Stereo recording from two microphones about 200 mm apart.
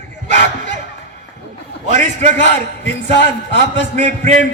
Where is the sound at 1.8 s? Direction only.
35° right (ahead or behind).